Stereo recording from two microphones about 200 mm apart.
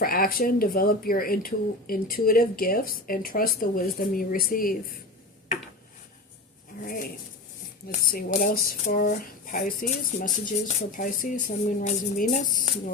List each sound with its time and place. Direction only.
0.0 s speech: 45° left (ahead or behind)
6.8 s speech: 45° left (ahead or behind)